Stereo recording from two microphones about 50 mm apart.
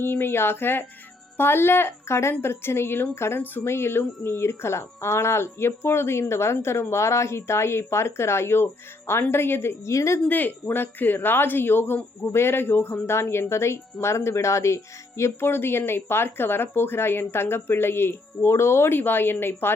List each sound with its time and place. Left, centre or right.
0.0 s speech: left
3.4 s speech: left
3.7 s speech: left
6.9 s speech: left
9.9 s speech: left
10.2 s speech: left
15.4 s speech: left
18.9 s speech: left